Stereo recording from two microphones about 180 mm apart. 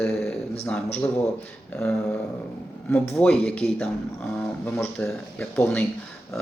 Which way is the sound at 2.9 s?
5° left (ahead or behind).